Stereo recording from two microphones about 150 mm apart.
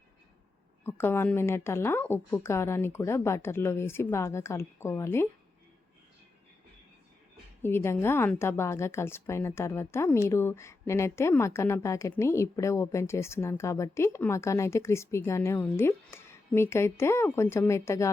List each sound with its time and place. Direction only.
0.9 s a woman's voice: 15° left (ahead or behind)
7.6 s a woman's voice: 15° left (ahead or behind)